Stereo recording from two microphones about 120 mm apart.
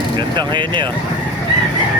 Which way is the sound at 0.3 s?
40° right (ahead or behind).